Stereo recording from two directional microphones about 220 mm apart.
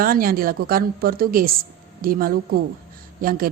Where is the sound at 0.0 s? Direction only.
40° right (ahead or behind).